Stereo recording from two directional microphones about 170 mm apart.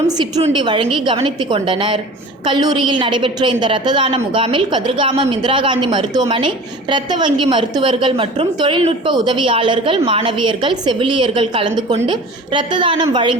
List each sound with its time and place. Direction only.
0.5 s a woman's voice: 25° right (ahead or behind)